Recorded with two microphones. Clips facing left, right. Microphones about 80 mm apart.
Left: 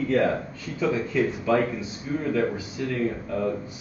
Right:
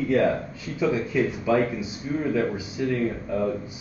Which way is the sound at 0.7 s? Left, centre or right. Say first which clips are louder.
Right 1 dB; centre.